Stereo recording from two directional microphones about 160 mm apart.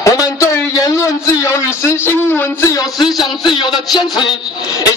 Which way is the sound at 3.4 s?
30° left (ahead or behind).